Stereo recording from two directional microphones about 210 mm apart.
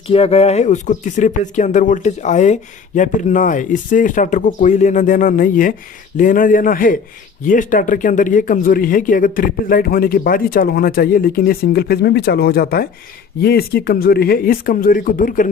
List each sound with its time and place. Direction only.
0.1 s speech: 30° left (ahead or behind)